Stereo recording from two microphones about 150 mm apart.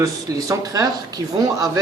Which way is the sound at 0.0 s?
20° right (ahead or behind).